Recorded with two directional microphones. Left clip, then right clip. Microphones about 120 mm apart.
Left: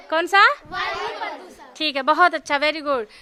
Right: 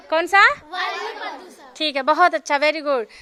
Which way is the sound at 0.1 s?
10° left (ahead or behind).